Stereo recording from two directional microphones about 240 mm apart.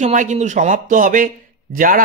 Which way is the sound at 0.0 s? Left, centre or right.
Right.